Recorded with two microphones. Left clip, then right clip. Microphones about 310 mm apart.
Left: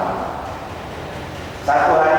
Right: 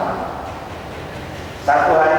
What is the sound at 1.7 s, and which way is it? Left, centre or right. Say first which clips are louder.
Speech: right 1 dB; centre.